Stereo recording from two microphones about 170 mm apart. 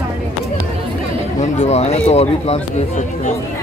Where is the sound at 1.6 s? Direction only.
40° left (ahead or behind).